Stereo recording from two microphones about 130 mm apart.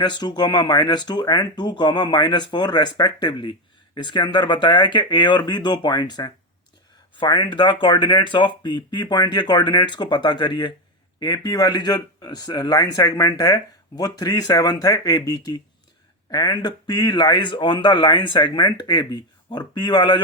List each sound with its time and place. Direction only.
0.0 s speech: 35° left (ahead or behind)